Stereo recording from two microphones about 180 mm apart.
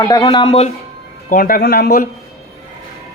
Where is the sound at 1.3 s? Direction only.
50° left (ahead or behind).